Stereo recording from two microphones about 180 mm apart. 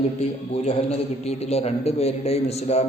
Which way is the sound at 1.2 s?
35° left (ahead or behind).